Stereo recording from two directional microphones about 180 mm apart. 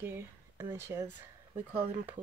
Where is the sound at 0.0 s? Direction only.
10° right (ahead or behind).